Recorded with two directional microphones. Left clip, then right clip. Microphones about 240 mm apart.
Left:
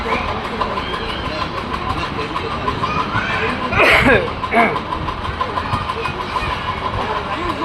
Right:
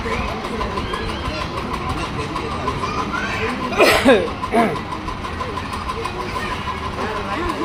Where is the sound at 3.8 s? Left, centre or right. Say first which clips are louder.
Left 1 dB; right.